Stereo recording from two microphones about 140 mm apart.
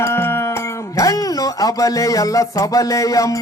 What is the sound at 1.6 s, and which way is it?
Music, 25° left (ahead or behind).